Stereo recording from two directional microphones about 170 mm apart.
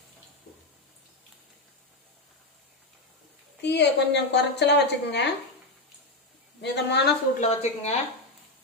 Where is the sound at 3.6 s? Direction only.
90° left.